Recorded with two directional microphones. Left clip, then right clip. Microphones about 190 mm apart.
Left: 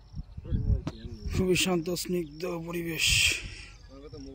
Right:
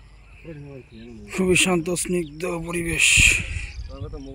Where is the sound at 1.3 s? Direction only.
5° right (ahead or behind).